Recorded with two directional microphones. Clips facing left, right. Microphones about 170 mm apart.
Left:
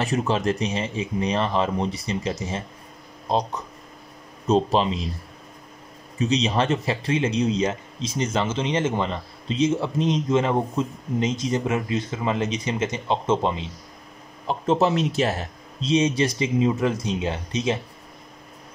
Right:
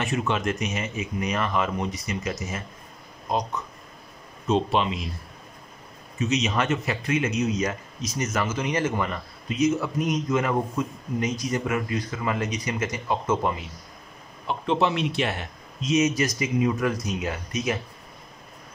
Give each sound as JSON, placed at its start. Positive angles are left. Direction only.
{"t": 0.0, "sound": "speech", "side_deg": 35}
{"t": 6.1, "sound": "speech", "side_deg": 30}
{"t": 14.5, "sound": "speech", "side_deg": 40}